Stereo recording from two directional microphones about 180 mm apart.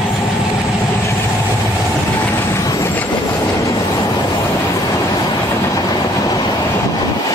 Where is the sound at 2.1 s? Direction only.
10° left (ahead or behind).